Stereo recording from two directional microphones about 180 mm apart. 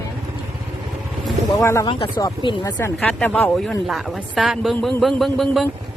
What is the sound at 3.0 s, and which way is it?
Speech, 5° left (ahead or behind).